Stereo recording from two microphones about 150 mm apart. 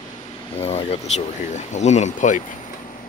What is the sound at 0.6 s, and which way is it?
Speech, 45° left (ahead or behind).